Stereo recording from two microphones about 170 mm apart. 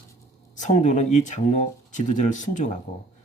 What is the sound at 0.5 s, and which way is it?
Speech, 45° left (ahead or behind).